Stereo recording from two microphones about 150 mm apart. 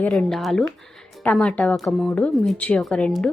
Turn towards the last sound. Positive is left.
turn(degrees=5)  # may be behind; listen again after turning